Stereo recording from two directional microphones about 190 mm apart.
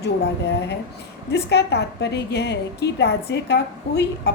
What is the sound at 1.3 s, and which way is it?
A woman's voice, 60° left (ahead or behind).